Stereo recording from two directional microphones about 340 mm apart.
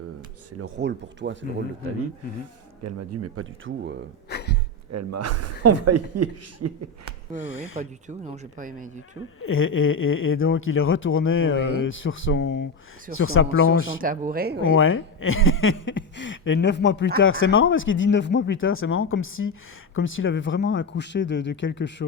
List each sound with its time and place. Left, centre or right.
0.6 s speech: right
2.8 s speech: right
3.7 s speech: right
4.3 s a sound: left
4.9 s speech: right
7.3 s speech: left
7.8 s speech: right
9.4 s speech: left
14.0 s speech: right
14.6 s speech: left